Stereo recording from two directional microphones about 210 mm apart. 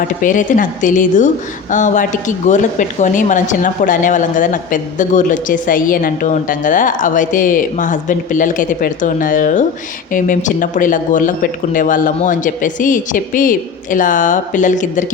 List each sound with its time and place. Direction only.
0.2 s a woman's voice: 40° left (ahead or behind)